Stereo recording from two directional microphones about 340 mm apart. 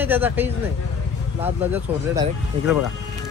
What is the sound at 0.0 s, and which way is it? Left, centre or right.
Speech, centre.